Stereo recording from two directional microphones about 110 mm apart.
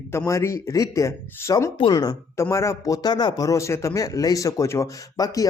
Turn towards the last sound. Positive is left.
turn(degrees=30)  # may be behind; listen again after turning